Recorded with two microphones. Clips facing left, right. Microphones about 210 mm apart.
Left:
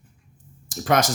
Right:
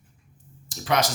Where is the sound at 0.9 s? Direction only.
50° left (ahead or behind).